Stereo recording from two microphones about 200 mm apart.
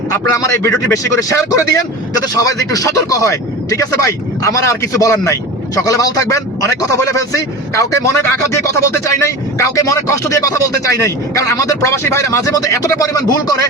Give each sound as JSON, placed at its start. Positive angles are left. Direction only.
{"t": 0.3, "sound": "speech", "side_deg": 15}